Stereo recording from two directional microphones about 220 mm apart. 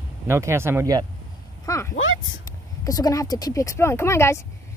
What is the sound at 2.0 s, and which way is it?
Speech, 65° left (ahead or behind).